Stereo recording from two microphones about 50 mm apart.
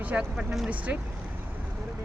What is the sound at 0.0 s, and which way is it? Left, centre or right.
Speech, right.